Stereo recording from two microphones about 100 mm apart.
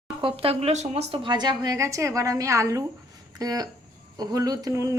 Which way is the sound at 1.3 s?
45° right (ahead or behind).